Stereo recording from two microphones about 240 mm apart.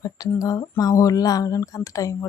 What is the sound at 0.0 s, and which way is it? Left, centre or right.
Speech, centre.